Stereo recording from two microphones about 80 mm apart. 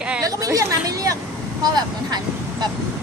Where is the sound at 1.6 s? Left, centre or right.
Right.